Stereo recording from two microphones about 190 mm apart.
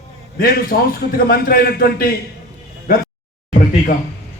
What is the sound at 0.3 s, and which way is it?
A man's voice, 50° left (ahead or behind).